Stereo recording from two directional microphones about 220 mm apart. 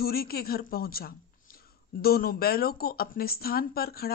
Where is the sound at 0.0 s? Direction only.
45° left (ahead or behind).